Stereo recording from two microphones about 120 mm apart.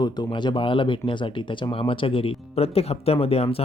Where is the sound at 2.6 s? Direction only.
60° left (ahead or behind).